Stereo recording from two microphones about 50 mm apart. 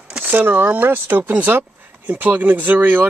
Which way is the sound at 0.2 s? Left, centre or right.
Right.